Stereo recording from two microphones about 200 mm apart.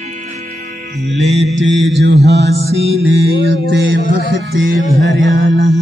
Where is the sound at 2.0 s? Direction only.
60° right (ahead or behind).